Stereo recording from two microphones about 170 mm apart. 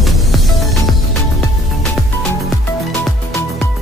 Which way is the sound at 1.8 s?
5° left (ahead or behind).